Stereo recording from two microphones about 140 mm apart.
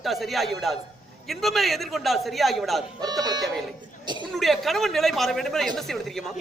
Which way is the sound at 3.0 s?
30° right (ahead or behind).